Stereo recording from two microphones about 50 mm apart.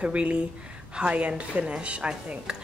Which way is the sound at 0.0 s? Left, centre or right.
Right.